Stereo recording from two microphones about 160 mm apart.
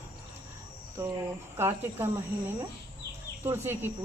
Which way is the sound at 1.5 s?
15° right (ahead or behind).